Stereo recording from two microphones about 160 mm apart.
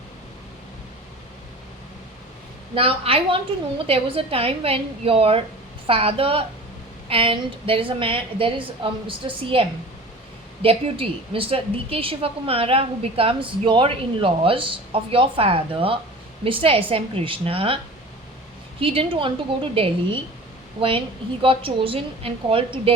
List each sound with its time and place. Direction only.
2.7 s a woman's voice: 35° right (ahead or behind)
18.8 s a woman's voice: 35° right (ahead or behind)
21.4 s a woman's voice: 35° right (ahead or behind)